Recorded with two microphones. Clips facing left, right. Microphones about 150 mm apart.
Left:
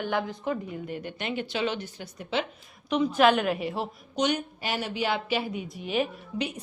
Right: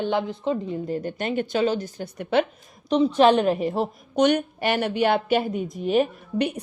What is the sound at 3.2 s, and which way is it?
A woman's voice, 35° right (ahead or behind).